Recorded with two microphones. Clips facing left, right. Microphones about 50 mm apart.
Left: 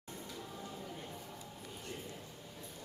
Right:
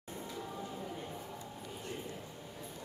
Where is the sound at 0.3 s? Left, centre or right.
Centre.